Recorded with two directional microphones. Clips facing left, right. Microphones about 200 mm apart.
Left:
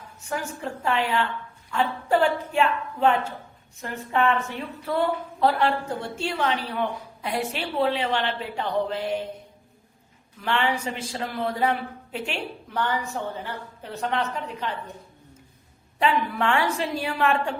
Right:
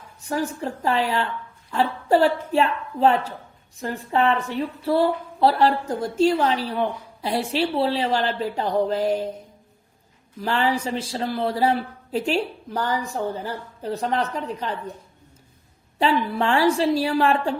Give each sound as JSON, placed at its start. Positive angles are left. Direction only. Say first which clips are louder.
{"t": 0.3, "sound": "a woman's voice", "louder": "right 5 dB", "side_deg": -35}
{"t": 10.4, "sound": "a woman's voice", "louder": "right 3 dB", "side_deg": -35}
{"t": 16.0, "sound": "a woman's voice", "louder": "right 2 dB", "side_deg": -30}